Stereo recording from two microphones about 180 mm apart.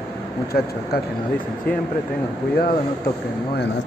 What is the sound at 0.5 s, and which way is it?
Speech, 60° left (ahead or behind).